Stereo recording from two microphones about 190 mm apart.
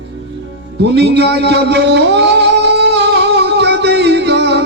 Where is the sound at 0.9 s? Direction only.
60° right (ahead or behind).